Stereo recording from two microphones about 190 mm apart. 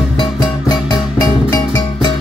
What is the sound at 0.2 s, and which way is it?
Music, 20° left (ahead or behind).